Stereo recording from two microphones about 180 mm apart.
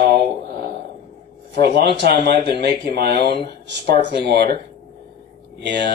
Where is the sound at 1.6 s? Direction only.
65° right (ahead or behind).